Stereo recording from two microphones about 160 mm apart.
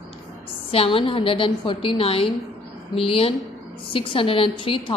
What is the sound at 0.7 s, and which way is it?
A woman's voice, 35° left (ahead or behind).